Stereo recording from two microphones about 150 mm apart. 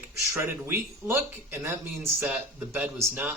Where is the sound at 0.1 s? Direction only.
20° right (ahead or behind).